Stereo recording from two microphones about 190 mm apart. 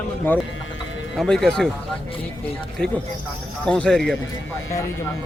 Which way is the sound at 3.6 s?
5° left (ahead or behind).